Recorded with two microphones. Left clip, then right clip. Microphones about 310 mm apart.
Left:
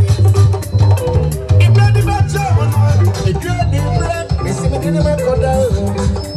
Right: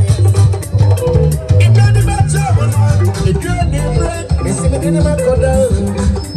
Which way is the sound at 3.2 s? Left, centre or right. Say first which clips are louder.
Right 1 dB; left.